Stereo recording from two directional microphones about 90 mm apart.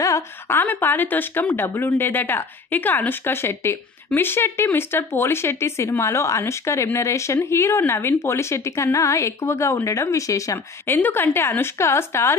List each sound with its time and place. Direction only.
0.0 s a woman's voice: 30° left (ahead or behind)
10.9 s a woman's voice: 25° left (ahead or behind)